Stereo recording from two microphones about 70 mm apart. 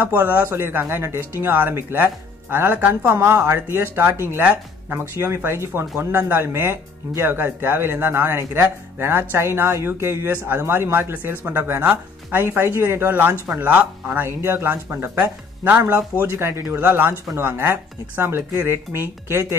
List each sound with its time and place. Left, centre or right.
0.0 s speech: right